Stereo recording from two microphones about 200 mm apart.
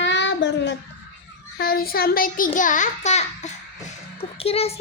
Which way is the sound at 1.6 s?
50° left (ahead or behind).